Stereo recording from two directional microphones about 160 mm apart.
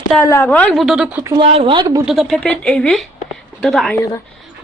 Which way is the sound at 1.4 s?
30° right (ahead or behind).